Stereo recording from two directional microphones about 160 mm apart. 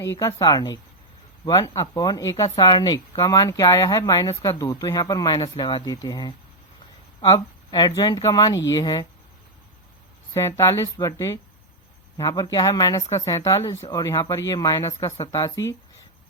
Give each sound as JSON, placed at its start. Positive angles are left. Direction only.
{"t": 0.0, "sound": "speech", "side_deg": 20}
{"t": 10.3, "sound": "speech", "side_deg": 15}